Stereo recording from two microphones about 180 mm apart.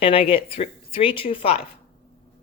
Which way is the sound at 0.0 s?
30° left (ahead or behind).